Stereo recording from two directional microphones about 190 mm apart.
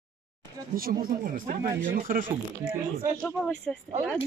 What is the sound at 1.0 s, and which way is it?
Speech, 45° right (ahead or behind).